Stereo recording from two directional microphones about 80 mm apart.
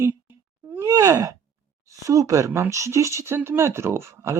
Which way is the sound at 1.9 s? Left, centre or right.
Right.